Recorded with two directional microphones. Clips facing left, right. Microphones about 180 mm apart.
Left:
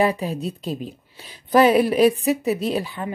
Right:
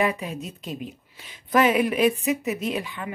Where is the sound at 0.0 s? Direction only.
35° left (ahead or behind).